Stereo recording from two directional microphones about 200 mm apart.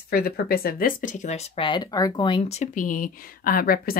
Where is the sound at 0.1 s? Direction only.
50° left (ahead or behind).